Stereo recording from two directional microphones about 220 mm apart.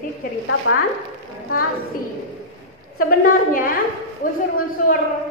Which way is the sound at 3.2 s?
40° left (ahead or behind).